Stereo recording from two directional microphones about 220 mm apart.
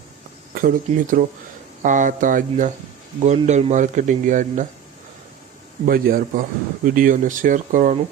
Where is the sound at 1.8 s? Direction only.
35° right (ahead or behind).